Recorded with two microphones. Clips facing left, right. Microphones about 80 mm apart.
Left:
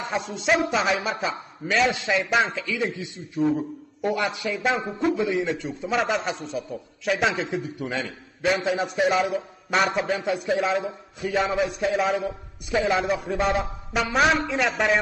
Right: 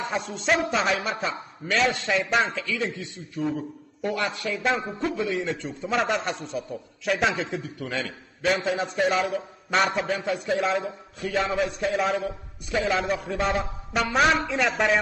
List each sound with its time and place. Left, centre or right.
0.0 s a man's voice: centre
2.8 s a man's voice: centre
5.4 s a man's voice: centre
7.8 s a man's voice: centre
12.8 s a man's voice: centre